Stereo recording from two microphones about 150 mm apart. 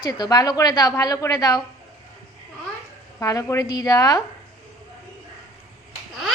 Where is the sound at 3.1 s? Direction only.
20° left (ahead or behind).